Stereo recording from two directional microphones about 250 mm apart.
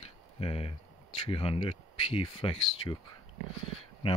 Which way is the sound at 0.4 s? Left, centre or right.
Left.